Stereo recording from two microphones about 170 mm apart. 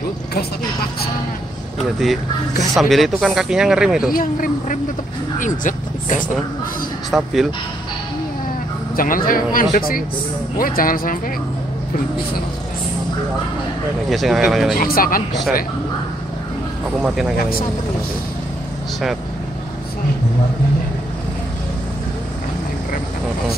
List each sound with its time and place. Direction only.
2.7 s speech: centre (ahead or behind)
4.1 s speech: 55° left (ahead or behind)
7.1 s speech: centre (ahead or behind)
8.9 s speech: 55° left (ahead or behind)
14.1 s speech: centre (ahead or behind)
14.8 s speech: 60° left (ahead or behind)
17.0 s speech: centre (ahead or behind)